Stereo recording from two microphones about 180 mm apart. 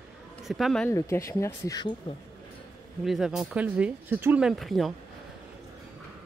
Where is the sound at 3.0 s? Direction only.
Centre (ahead or behind).